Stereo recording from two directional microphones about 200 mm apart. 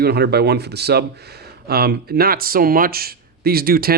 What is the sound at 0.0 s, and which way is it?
Speech, 55° right (ahead or behind).